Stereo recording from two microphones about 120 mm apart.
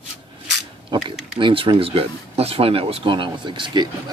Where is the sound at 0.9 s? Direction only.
45° right (ahead or behind).